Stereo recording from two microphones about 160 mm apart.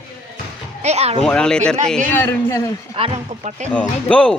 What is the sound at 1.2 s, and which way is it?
A man's voice, 5° left (ahead or behind).